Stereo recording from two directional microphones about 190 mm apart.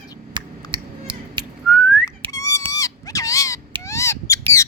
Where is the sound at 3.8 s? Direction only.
15° left (ahead or behind).